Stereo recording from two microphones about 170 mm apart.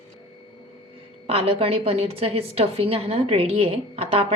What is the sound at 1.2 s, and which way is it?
A woman's voice, 35° right (ahead or behind).